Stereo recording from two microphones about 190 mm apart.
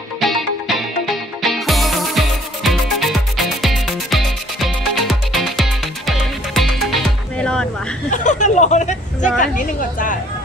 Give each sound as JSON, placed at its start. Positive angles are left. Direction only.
{"t": 0.2, "sound": "music", "side_deg": 0}
{"t": 8.1, "sound": "a sound", "side_deg": 40}
{"t": 9.4, "sound": "a woman's voice", "side_deg": 45}